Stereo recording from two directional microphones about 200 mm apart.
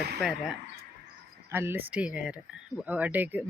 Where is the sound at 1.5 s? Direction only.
10° right (ahead or behind).